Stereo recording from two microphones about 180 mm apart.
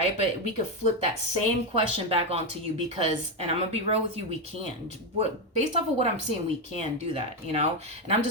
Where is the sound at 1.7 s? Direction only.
35° right (ahead or behind).